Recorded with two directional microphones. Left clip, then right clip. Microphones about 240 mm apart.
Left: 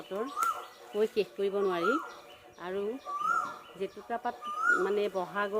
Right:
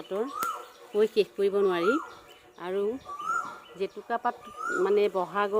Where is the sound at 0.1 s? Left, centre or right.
Right.